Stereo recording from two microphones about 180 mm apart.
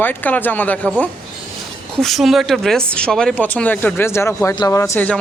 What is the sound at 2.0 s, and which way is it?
Speech, centre (ahead or behind).